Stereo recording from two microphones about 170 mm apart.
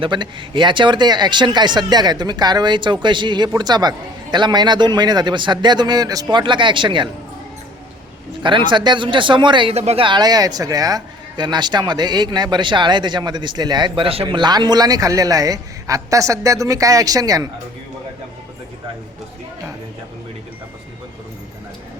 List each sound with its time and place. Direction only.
0.0 s speech: 30° right (ahead or behind)
8.4 s speech: 30° right (ahead or behind)